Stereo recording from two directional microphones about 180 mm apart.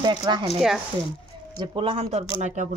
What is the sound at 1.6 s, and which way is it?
Speech, 30° right (ahead or behind).